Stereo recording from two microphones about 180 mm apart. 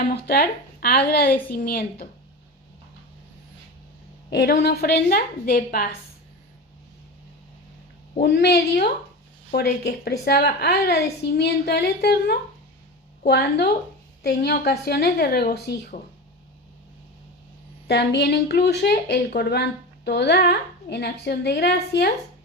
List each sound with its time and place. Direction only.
0.0 s a woman's voice: 60° left (ahead or behind)
4.3 s a woman's voice: 70° left (ahead or behind)
8.2 s a woman's voice: 65° left (ahead or behind)
17.8 s a woman's voice: 70° left (ahead or behind)